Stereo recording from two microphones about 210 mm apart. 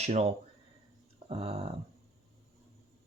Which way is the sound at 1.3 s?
30° right (ahead or behind).